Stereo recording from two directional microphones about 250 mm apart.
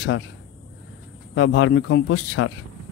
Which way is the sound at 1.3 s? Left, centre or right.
Left.